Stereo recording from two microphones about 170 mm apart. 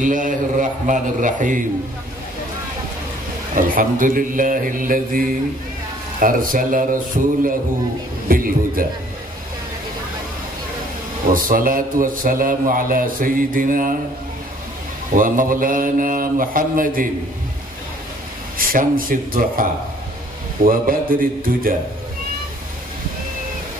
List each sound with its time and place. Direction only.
0.0 s speech: 50° right (ahead or behind)
3.5 s speech: 55° right (ahead or behind)
8.3 s speech: 55° right (ahead or behind)
11.2 s speech: 55° right (ahead or behind)
15.1 s speech: 55° right (ahead or behind)
18.6 s speech: 55° right (ahead or behind)